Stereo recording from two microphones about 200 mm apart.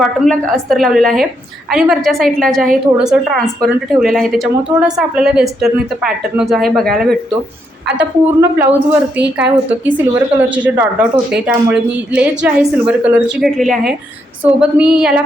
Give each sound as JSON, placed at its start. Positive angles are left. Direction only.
{"t": 0.0, "sound": "a woman's voice", "side_deg": 0}
{"t": 9.1, "sound": "a woman's voice", "side_deg": -60}
{"t": 9.6, "sound": "a woman's voice", "side_deg": -10}